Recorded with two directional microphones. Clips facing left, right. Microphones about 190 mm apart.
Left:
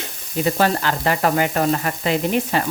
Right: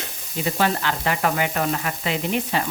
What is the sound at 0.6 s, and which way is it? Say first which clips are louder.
Sizzle: even; 40° left (ahead or behind).